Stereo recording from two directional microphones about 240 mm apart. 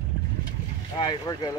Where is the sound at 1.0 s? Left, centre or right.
Centre.